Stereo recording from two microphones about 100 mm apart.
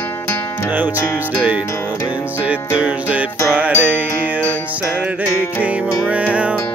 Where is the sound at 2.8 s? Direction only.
15° right (ahead or behind).